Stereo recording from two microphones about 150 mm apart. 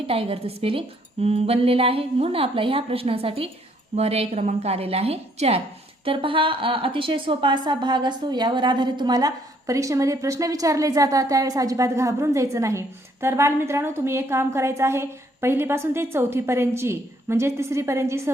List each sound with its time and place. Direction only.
0.1 s a woman's voice: 40° right (ahead or behind); by 18.2 s 20° right (ahead or behind)